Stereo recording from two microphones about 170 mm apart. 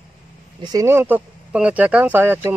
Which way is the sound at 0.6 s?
20° right (ahead or behind).